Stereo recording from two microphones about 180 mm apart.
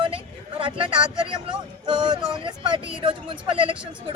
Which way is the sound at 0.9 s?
5° right (ahead or behind).